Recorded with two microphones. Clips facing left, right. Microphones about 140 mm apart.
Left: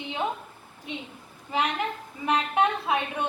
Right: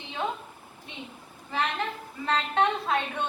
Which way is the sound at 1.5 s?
15° left (ahead or behind).